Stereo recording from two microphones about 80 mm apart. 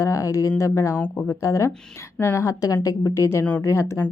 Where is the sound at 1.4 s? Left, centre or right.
Left.